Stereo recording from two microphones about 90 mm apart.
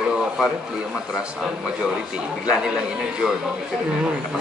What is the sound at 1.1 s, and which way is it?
Speech, 5° right (ahead or behind).